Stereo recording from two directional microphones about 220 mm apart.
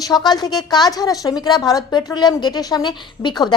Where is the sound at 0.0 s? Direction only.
20° left (ahead or behind).